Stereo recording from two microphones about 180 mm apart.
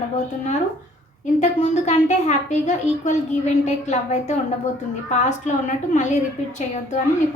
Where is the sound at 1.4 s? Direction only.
40° left (ahead or behind).